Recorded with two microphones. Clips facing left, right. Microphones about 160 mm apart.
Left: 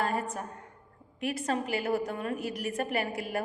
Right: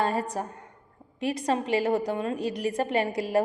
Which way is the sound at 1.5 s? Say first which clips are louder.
Right 5 dB; 30° right (ahead or behind).